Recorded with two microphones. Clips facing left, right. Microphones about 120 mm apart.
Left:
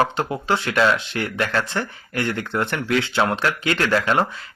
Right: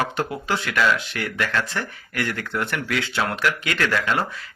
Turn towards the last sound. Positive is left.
turn(degrees=30)  # may be behind; listen again after turning